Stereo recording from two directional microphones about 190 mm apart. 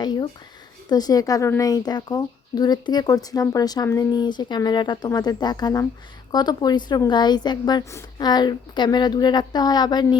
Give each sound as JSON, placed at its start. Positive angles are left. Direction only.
{"t": 0.0, "sound": "a woman's voice", "side_deg": 20}